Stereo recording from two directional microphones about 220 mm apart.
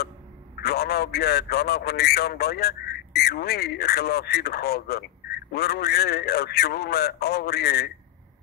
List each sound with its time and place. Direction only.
0.6 s a man's voice: 45° left (ahead or behind)